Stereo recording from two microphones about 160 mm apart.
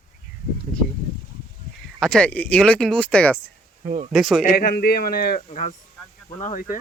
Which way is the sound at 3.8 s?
50° right (ahead or behind).